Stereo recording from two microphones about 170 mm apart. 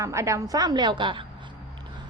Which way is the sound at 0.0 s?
15° right (ahead or behind).